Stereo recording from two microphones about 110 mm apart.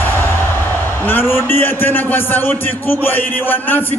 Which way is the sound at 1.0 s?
20° left (ahead or behind).